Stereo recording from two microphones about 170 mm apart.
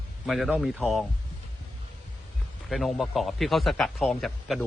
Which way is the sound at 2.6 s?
Centre (ahead or behind).